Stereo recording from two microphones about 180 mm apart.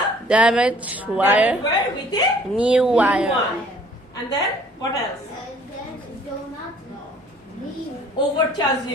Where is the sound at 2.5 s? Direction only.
5° right (ahead or behind).